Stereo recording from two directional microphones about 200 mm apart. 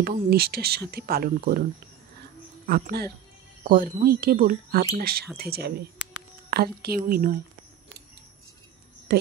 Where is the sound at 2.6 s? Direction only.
50° right (ahead or behind).